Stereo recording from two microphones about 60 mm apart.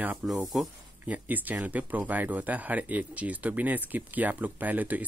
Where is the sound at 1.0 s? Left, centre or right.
Right.